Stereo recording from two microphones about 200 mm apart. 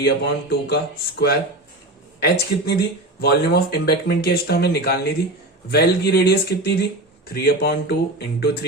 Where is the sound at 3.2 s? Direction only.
55° left (ahead or behind).